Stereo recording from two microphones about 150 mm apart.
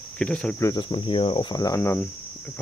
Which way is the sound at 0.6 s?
25° left (ahead or behind).